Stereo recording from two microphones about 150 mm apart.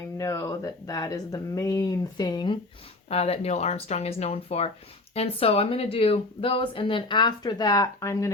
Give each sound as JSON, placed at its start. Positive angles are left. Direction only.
{"t": 0.2, "sound": "speech", "side_deg": 20}
{"t": 3.1, "sound": "speech", "side_deg": 40}